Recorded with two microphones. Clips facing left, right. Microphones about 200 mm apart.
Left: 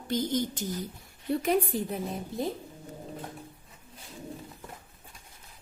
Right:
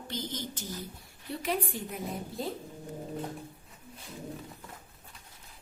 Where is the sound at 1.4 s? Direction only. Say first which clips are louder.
Left 4 dB; 40° left (ahead or behind).